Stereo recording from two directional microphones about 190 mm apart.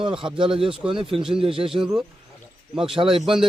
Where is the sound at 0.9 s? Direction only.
25° right (ahead or behind).